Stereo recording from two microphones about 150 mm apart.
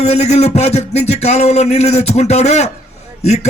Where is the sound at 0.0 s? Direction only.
45° left (ahead or behind).